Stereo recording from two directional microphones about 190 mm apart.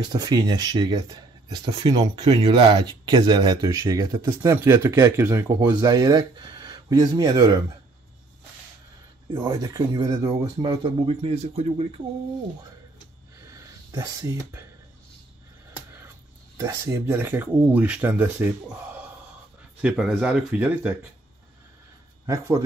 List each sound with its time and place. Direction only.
0.1 s speech: 20° right (ahead or behind)
9.4 s speech: 20° right (ahead or behind)
13.5 s a sound: 15° right (ahead or behind)
16.5 s speech: 15° right (ahead or behind)
22.2 s a man's voice: 15° right (ahead or behind)